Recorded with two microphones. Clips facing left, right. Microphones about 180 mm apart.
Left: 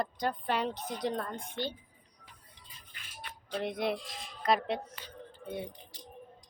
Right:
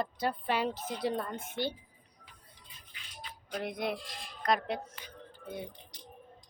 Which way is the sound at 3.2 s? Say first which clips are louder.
Left 1 dB; 60° left (ahead or behind).